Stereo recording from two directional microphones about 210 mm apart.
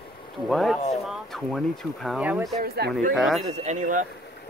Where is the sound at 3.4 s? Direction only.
35° right (ahead or behind).